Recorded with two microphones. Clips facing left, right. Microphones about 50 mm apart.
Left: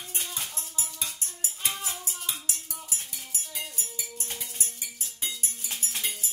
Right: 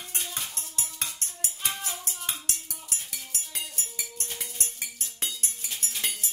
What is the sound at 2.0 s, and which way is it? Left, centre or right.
Music, right.